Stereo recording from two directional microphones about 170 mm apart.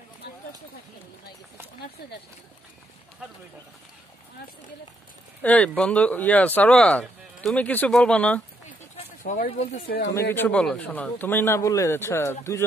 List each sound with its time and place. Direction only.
5.4 s speech: 10° left (ahead or behind)
8.9 s a sound: 45° left (ahead or behind)
9.5 s speech: 35° left (ahead or behind)
9.8 s speech: 70° left (ahead or behind)
10.3 s speech: 10° left (ahead or behind)